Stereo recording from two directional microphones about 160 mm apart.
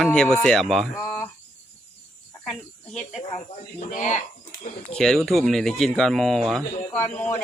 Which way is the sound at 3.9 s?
45° left (ahead or behind).